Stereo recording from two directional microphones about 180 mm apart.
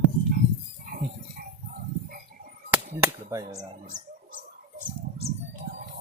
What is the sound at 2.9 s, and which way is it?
Speech, 20° right (ahead or behind).